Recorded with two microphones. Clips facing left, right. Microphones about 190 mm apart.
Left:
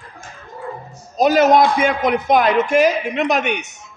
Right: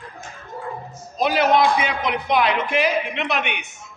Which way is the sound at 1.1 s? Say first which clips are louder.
Left 5 dB; 45° left (ahead or behind).